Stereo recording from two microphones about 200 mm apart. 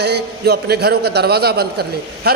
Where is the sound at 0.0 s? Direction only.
55° right (ahead or behind).